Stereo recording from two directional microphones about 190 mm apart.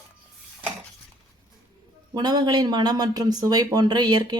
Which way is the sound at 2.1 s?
20° right (ahead or behind).